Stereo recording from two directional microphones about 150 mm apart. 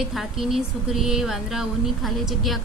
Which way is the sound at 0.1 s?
Centre (ahead or behind).